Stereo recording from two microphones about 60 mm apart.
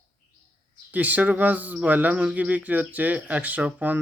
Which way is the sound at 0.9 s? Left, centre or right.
Right.